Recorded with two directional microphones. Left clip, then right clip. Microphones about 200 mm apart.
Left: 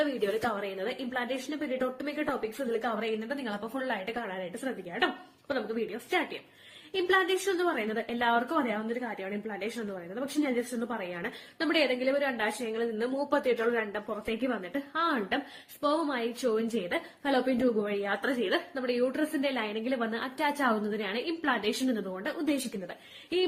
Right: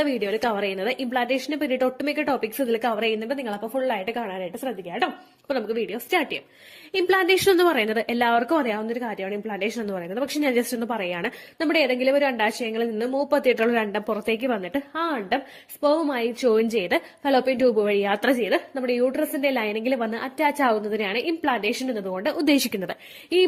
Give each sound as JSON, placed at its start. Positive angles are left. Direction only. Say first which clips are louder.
{"t": 0.0, "sound": "a woman's voice", "louder": "right 6 dB", "side_deg": -40}